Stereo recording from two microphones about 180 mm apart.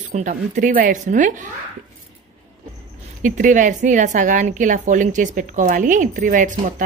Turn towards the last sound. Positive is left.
turn(degrees=-45)  # may be behind; listen again after turning